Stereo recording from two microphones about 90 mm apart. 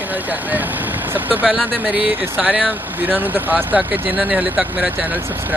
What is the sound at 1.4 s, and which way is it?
Speech, 5° left (ahead or behind).